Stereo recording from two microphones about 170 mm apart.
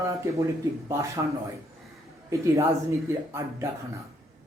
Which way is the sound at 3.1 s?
15° right (ahead or behind).